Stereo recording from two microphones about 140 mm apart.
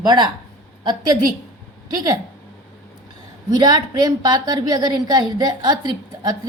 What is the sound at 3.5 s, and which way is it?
A woman's voice, 30° right (ahead or behind).